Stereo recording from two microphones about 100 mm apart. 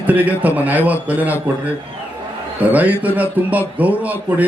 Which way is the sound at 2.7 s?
15° right (ahead or behind).